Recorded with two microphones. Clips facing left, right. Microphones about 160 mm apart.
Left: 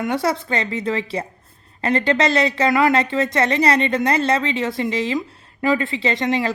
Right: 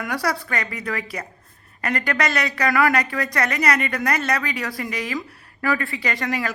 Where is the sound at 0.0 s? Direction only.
25° left (ahead or behind).